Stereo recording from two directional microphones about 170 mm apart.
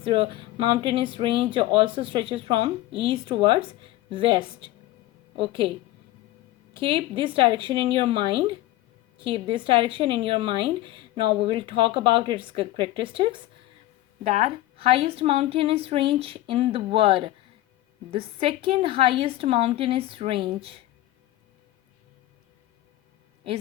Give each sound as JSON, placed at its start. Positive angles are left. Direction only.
{"t": 0.1, "sound": "speech", "side_deg": -30}
{"t": 6.7, "sound": "a woman's voice", "side_deg": -30}